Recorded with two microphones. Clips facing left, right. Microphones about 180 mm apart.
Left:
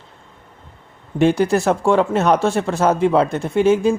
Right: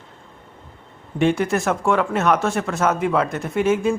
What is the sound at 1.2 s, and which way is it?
Speech, 35° left (ahead or behind).